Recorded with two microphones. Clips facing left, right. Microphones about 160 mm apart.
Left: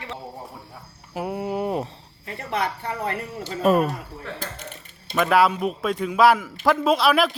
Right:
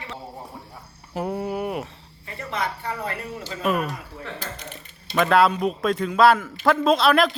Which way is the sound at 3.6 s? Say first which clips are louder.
Left 5 dB; 35° left (ahead or behind).